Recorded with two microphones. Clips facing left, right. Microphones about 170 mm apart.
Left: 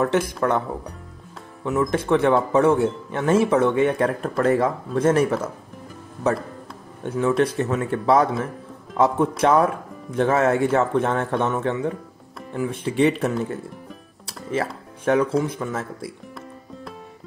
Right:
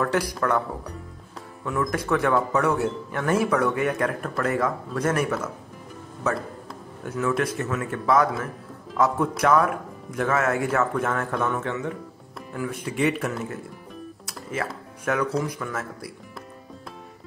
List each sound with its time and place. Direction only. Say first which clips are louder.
0.0 s speech: left 3 dB; 25° left (ahead or behind)
1.6 s speech: left 5 dB; 20° left (ahead or behind)
7.0 s speech: left 5 dB; 30° left (ahead or behind)
14.2 s music: left 5 dB; 30° left (ahead or behind)
15.4 s speech: left 3 dB; 25° left (ahead or behind)